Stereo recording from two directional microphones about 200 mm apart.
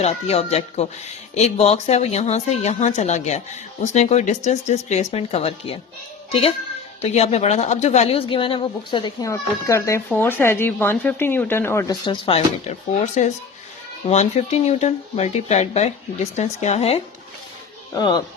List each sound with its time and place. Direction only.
0.0 s speech: 30° left (ahead or behind)
7.0 s speech: 30° left (ahead or behind)
17.9 s speech: 20° left (ahead or behind)